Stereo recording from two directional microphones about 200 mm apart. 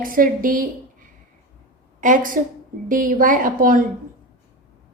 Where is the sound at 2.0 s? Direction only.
40° right (ahead or behind).